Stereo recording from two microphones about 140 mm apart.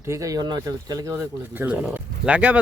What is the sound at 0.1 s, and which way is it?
Speech, 25° right (ahead or behind).